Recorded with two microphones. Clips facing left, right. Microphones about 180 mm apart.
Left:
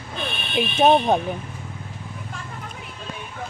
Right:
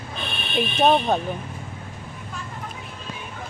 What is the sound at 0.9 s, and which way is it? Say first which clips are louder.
Speech: left 3 dB; 15° left (ahead or behind).